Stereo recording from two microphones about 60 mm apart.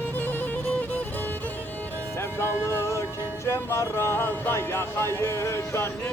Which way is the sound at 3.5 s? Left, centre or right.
Left.